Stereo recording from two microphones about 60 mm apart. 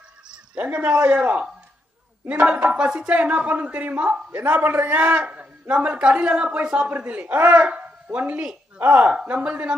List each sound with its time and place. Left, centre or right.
0.3 s a sound: right
0.9 s a man's voice: right
2.6 s a man's voice: centre
4.3 s a man's voice: right